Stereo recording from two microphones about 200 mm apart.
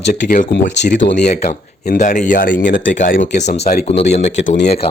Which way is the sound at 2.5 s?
60° left (ahead or behind).